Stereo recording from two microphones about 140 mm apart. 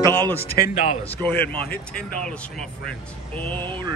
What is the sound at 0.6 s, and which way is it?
Speech, 65° left (ahead or behind).